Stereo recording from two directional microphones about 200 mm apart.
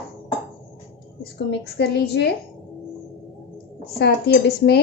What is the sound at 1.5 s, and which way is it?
Speech, 55° left (ahead or behind).